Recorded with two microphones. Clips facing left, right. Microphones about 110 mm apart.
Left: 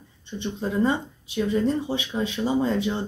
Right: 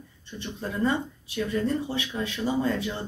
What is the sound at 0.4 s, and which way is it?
Speech, 20° left (ahead or behind).